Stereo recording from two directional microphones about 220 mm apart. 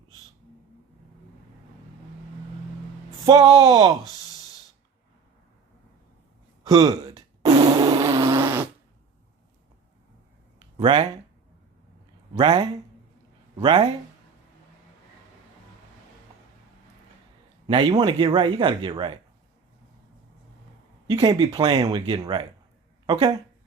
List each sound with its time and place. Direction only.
3.2 s speech: 15° right (ahead or behind)
6.7 s a sound: 15° right (ahead or behind)
10.8 s speech: 20° right (ahead or behind)
12.3 s speech: 20° right (ahead or behind)
17.7 s speech: 20° right (ahead or behind)
21.1 s speech: 20° right (ahead or behind)